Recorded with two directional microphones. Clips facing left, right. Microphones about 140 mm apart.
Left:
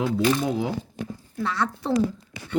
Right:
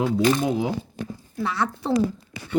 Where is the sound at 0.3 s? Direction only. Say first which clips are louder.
Right 2 dB; 15° right (ahead or behind).